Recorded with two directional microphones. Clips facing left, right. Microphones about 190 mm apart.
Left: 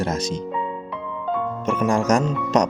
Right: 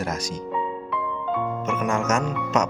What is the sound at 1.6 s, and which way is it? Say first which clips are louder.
Speech: left 7 dB; 35° left (ahead or behind).